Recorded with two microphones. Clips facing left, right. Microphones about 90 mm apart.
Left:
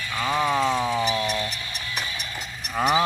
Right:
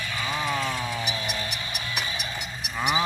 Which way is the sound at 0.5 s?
90° left.